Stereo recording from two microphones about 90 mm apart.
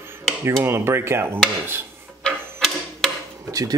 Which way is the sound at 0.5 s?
25° right (ahead or behind).